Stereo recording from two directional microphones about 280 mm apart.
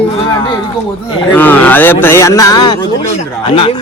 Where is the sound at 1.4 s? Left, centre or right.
Centre.